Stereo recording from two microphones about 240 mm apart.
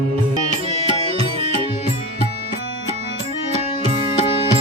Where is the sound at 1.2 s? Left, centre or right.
Right.